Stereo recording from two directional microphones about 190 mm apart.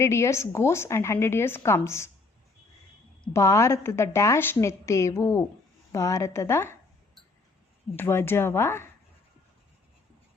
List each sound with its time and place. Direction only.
0.0 s a woman's voice: 15° left (ahead or behind)
3.3 s a woman's voice: 15° left (ahead or behind)
7.9 s a woman's voice: 10° left (ahead or behind)